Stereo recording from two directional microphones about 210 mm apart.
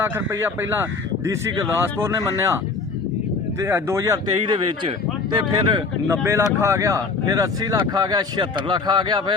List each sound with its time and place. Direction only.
0.0 s speech: 10° right (ahead or behind)
3.6 s speech: 10° right (ahead or behind)